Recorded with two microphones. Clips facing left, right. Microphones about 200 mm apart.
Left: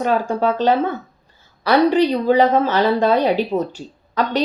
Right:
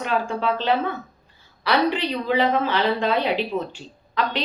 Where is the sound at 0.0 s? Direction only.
40° left (ahead or behind).